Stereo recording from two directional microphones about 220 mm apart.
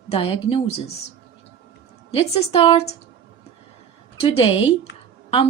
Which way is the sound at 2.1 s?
25° left (ahead or behind).